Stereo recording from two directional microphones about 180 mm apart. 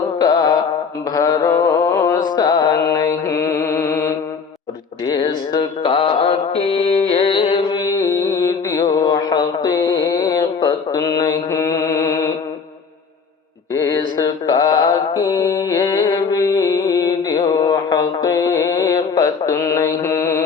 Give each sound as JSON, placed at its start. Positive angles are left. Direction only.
{"t": 0.2, "sound": "music", "side_deg": 20}
{"t": 2.8, "sound": "mantra", "side_deg": 20}
{"t": 5.0, "sound": "music", "side_deg": 25}
{"t": 13.7, "sound": "mantra", "side_deg": 20}